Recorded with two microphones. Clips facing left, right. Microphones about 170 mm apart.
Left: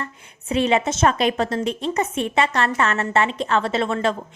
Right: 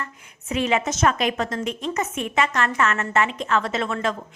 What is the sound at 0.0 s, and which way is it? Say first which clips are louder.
A woman's voice: left 2 dB; 30° left (ahead or behind).